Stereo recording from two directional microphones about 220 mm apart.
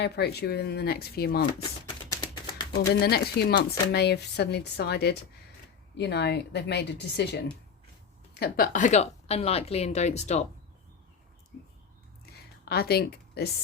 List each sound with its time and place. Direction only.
0.0 s speech: 50° left (ahead or behind)
2.0 s a sound: 15° left (ahead or behind)
2.9 s speech: 50° left (ahead or behind); by 10.4 s 30° left (ahead or behind)
12.6 s speech: 45° left (ahead or behind)